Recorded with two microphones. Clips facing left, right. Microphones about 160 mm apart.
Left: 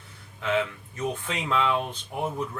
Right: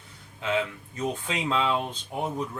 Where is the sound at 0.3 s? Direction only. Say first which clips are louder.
Left 1 dB; 15° right (ahead or behind).